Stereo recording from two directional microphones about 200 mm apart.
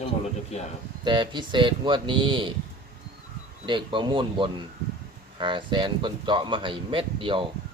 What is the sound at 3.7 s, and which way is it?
Speech, 25° right (ahead or behind).